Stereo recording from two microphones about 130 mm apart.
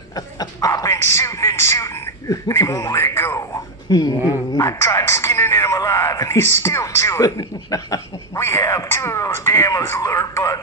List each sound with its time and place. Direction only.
0.1 s speech: 25° left (ahead or behind)